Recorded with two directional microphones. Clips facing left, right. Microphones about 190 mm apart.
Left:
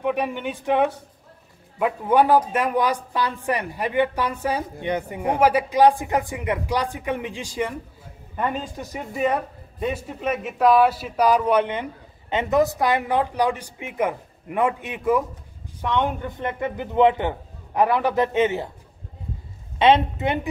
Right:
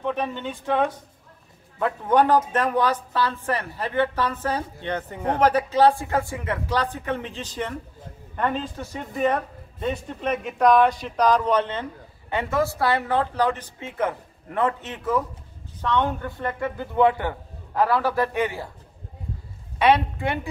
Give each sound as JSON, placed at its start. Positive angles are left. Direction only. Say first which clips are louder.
{"t": 0.0, "sound": "a man's voice", "louder": "left 3 dB", "side_deg": 10}
{"t": 19.8, "sound": "a man's voice", "louder": "left 2 dB", "side_deg": 20}